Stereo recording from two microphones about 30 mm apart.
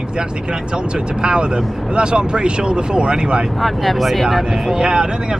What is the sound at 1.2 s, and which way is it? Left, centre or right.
Speech, right.